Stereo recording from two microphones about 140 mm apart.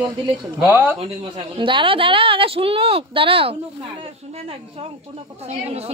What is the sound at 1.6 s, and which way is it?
Speech, 35° right (ahead or behind).